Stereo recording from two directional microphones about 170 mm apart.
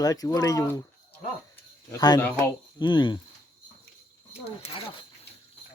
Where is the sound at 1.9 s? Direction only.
20° left (ahead or behind).